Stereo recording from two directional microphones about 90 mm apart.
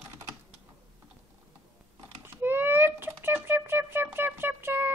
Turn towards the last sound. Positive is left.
turn(degrees=-25)  # may be behind; listen again after turning